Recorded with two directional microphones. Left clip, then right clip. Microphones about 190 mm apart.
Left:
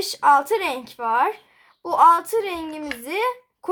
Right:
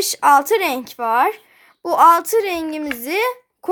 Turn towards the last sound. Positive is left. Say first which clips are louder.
# right 3 dB
turn(degrees=-25)  # may be behind; listen again after turning